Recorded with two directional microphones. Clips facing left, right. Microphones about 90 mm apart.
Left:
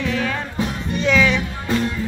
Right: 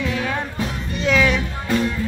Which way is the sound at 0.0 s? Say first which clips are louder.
Left 1 dB; 15° right (ahead or behind).